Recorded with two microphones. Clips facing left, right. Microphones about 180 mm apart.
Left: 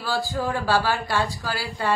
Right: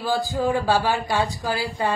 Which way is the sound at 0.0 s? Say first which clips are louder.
Right 3 dB; 20° right (ahead or behind).